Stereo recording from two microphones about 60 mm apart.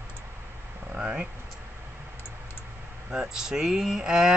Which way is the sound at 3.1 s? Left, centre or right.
Centre.